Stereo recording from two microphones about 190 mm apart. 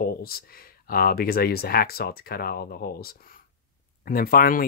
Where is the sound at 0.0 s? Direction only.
50° left (ahead or behind).